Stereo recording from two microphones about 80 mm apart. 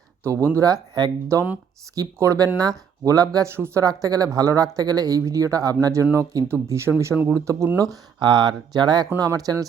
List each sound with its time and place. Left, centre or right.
0.3 s speech: right
1.3 s speech: right
8.2 s speech: right